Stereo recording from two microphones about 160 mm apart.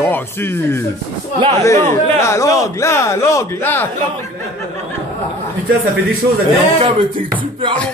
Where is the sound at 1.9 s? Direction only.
20° left (ahead or behind).